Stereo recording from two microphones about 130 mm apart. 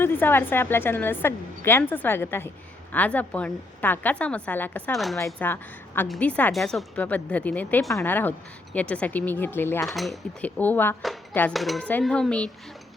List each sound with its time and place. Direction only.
0.0 s a woman's voice: 15° left (ahead or behind)
4.9 s speech: centre (ahead or behind)
5.2 s a woman's voice: 15° left (ahead or behind)
6.5 s speech: centre (ahead or behind)
6.9 s a woman's voice: 10° left (ahead or behind)
9.8 s speech: centre (ahead or behind)
10.4 s a woman's voice: 15° left (ahead or behind)
11.5 s a woman's voice: centre (ahead or behind)